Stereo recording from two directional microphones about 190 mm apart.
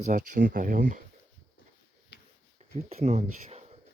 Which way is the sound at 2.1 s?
60° left (ahead or behind).